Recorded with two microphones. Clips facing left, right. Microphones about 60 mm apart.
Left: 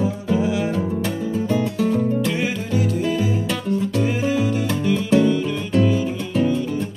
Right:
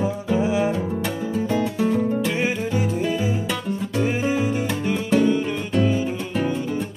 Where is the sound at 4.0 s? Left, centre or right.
Right.